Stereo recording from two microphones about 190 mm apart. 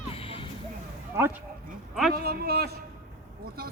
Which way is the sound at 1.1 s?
15° right (ahead or behind).